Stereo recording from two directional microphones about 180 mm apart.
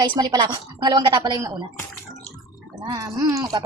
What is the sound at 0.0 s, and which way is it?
A woman's voice, 25° right (ahead or behind).